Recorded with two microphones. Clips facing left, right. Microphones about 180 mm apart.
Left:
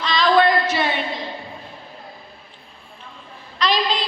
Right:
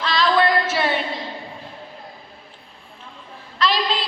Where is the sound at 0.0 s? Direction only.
5° right (ahead or behind).